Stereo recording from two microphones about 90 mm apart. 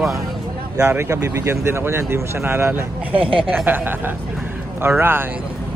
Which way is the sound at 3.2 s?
80° right.